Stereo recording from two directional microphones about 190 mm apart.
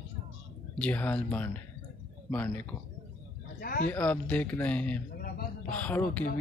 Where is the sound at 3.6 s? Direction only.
50° left (ahead or behind).